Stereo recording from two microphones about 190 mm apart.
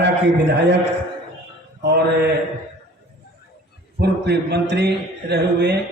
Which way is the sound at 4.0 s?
60° right (ahead or behind).